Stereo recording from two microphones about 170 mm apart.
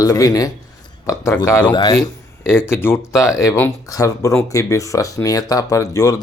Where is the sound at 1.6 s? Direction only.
25° left (ahead or behind).